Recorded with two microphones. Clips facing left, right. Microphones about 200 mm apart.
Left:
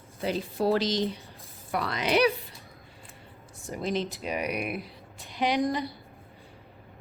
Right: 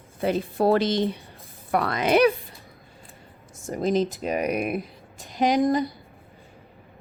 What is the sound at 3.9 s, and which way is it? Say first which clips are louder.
A woman's voice: right 6 dB; 45° right (ahead or behind).